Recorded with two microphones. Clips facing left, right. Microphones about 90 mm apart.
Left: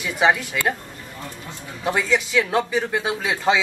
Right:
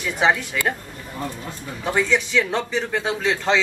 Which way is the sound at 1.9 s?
5° left (ahead or behind).